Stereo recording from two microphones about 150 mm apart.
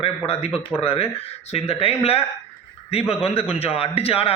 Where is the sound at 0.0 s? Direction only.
40° left (ahead or behind).